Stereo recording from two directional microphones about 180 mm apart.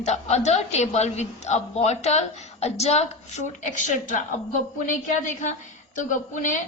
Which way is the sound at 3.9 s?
45° left (ahead or behind).